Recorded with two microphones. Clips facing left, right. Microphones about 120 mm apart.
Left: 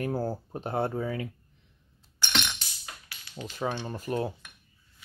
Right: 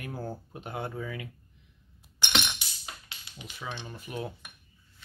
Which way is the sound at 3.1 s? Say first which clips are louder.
Even; 25° right (ahead or behind).